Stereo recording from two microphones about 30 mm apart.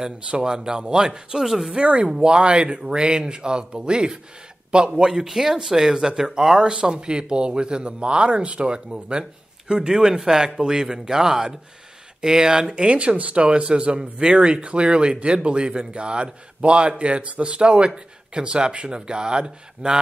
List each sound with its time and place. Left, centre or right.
0.4 s speech: right
1.7 s speech: right
5.0 s speech: right
6.7 s speech: right
12.7 s speech: right